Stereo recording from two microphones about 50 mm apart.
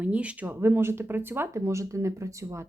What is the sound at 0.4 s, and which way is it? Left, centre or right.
Speech, right.